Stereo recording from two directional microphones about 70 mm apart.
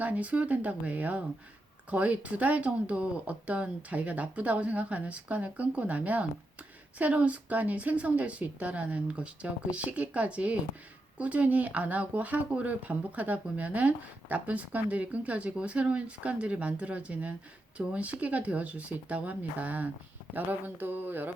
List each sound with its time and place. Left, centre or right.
0.0 s speech: right